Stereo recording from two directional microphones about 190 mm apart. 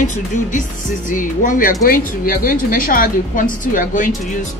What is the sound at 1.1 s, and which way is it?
A woman's voice, 45° left (ahead or behind).